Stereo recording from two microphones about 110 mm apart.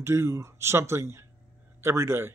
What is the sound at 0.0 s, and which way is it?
Speech, 25° right (ahead or behind).